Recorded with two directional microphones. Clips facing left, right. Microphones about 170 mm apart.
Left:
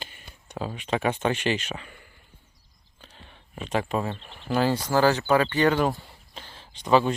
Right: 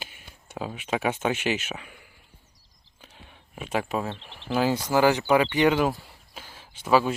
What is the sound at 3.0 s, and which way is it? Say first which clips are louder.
Speech: even; 10° right (ahead or behind).